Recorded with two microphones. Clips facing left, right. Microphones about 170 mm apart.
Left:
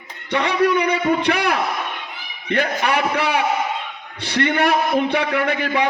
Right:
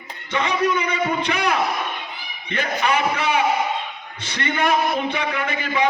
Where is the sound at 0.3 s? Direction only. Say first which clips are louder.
Left 3 dB; 65° left (ahead or behind).